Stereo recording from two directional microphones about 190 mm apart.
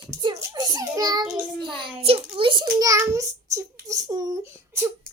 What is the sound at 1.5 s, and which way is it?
A child's voice, 25° right (ahead or behind).